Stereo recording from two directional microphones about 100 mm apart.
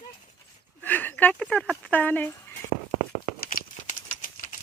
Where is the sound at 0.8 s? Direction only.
20° left (ahead or behind).